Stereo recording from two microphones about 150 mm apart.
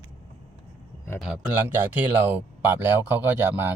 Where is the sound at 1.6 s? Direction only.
10° right (ahead or behind).